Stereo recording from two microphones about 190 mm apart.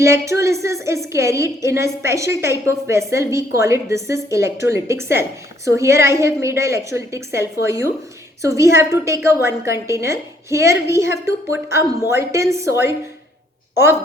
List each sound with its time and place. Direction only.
0.0 s a woman's voice: 15° right (ahead or behind)